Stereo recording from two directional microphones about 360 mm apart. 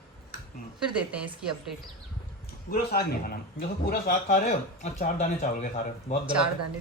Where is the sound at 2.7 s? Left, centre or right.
Left.